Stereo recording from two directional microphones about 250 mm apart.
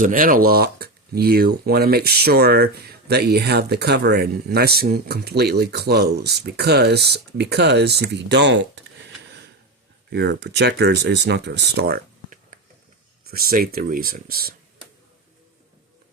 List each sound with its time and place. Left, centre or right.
0.0 s speech: right
10.1 s speech: right